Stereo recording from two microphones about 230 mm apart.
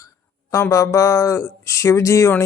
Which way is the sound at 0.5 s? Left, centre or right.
Centre.